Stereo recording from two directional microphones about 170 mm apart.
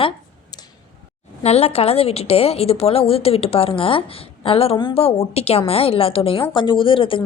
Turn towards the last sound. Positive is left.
turn(degrees=30)  # may be behind; listen again after turning